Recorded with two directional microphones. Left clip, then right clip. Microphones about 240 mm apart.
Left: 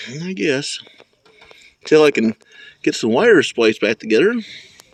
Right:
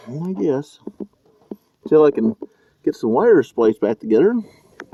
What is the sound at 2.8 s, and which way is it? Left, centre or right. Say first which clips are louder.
Speech: left 2 dB; left.